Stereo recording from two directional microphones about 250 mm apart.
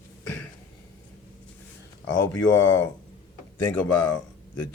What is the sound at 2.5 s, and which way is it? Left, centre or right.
A man's voice, centre.